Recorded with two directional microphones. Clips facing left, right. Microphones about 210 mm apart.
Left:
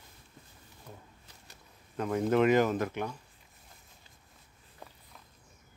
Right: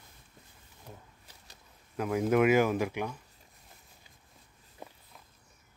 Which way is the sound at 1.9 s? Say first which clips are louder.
Right 1 dB; 10° right (ahead or behind).